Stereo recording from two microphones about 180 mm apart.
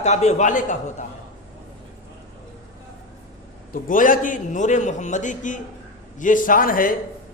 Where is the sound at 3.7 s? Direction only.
50° left (ahead or behind).